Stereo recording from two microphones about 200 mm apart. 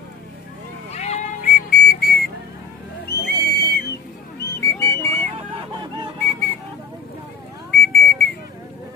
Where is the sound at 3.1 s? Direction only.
55° left (ahead or behind).